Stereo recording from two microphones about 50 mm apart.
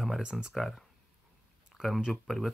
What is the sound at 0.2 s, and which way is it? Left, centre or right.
Speech, centre.